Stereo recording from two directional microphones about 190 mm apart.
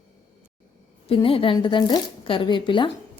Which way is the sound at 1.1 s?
30° left (ahead or behind).